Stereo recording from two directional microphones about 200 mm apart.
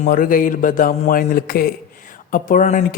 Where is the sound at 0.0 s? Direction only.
40° left (ahead or behind).